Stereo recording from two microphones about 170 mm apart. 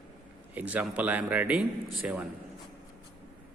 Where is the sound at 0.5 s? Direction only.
10° right (ahead or behind).